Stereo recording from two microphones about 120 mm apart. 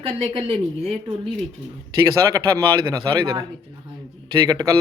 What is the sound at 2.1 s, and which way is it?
A man's voice, 30° right (ahead or behind).